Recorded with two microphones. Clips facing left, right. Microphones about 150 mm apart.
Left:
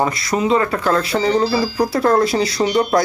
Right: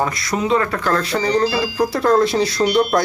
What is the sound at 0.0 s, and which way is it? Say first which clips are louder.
Speech: left 2 dB; centre (ahead or behind).